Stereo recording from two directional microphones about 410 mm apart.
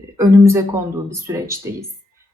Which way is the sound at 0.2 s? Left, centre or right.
Centre.